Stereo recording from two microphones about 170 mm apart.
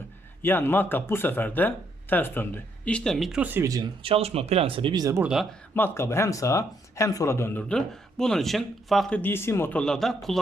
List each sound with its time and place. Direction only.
0.4 s speech: 10° left (ahead or behind); by 3.8 s 20° right (ahead or behind)
4.0 s speech: 35° right (ahead or behind)
5.2 s speech: 5° right (ahead or behind)
5.7 s speech: 15° left (ahead or behind)